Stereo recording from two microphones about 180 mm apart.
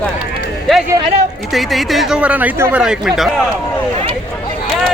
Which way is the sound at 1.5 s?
Centre (ahead or behind).